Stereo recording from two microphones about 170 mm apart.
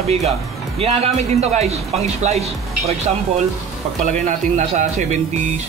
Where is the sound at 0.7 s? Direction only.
35° right (ahead or behind).